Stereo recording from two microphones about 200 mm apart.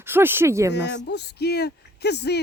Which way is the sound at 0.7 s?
60° left (ahead or behind).